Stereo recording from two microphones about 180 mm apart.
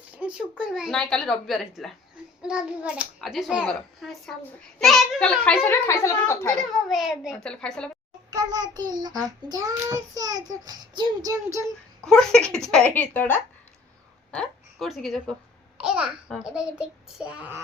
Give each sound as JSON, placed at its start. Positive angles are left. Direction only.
{"t": 0.1, "sound": "a child's voice", "side_deg": -5}
{"t": 6.6, "sound": "a child's voice", "side_deg": 0}
{"t": 8.3, "sound": "a child's voice", "side_deg": -20}
{"t": 12.0, "sound": "a child's voice", "side_deg": 5}